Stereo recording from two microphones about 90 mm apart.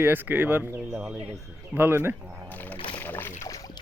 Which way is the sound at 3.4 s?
40° left (ahead or behind).